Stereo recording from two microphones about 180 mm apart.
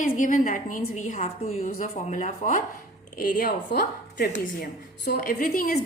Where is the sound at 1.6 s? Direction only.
50° left (ahead or behind).